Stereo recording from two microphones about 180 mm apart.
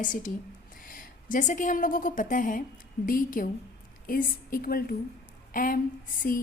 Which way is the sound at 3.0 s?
50° left (ahead or behind).